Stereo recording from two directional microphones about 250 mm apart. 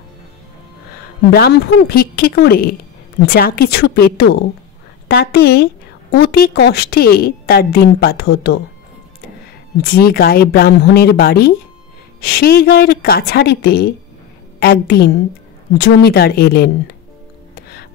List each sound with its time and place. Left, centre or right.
1.3 s a woman's voice: left
9.8 s a woman's voice: left
17.6 s music: left